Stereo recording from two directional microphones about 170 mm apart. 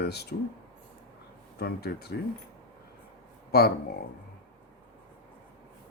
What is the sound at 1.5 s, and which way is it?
Speech, 70° left (ahead or behind).